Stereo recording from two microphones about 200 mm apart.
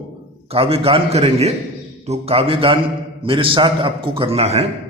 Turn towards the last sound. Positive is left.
turn(degrees=-30)  # may be behind; listen again after turning